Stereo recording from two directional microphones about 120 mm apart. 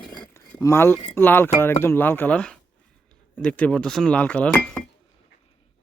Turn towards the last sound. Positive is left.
turn(degrees=10)  # may be behind; listen again after turning